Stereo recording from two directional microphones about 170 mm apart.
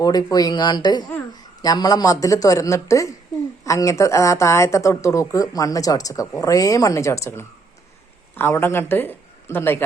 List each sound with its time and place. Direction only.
0.0 s speech: 20° left (ahead or behind)